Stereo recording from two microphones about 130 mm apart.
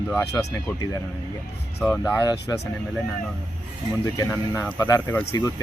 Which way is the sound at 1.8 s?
15° left (ahead or behind).